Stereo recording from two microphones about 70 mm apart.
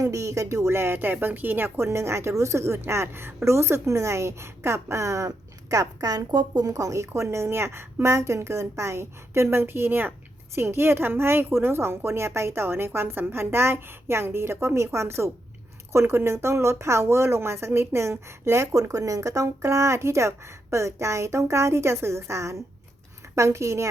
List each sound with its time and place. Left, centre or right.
0.0 s a woman's voice: right
6.7 s a woman's voice: right